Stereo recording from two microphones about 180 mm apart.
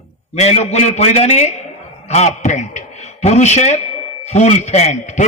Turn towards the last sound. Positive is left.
turn(degrees=40)  # may be behind; listen again after turning